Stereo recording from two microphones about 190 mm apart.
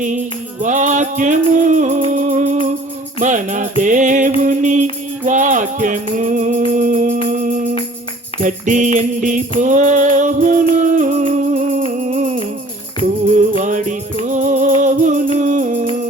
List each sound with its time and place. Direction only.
0.6 s music: 40° right (ahead or behind)